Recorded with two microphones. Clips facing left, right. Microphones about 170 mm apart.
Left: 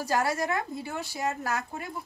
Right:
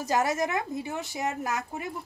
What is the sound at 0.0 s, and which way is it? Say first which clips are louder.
A woman's voice: right 1 dB; 20° right (ahead or behind).